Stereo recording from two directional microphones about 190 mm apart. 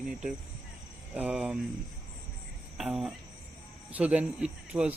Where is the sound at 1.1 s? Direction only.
5° right (ahead or behind).